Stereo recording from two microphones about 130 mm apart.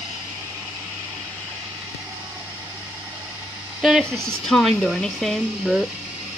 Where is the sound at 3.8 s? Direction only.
Centre (ahead or behind).